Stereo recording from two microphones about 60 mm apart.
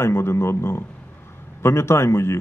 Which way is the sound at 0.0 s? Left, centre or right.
Left.